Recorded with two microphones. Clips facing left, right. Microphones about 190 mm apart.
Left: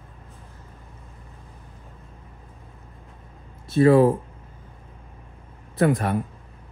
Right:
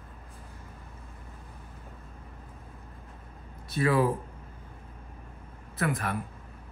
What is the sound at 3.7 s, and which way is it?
Speech, 25° left (ahead or behind).